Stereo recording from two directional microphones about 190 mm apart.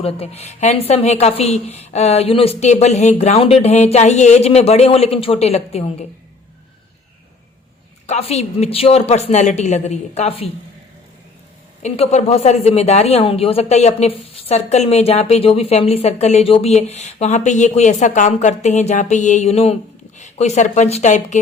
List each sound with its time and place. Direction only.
0.0 s speech: 30° left (ahead or behind)
8.0 s speech: 35° left (ahead or behind)
11.8 s speech: 35° left (ahead or behind)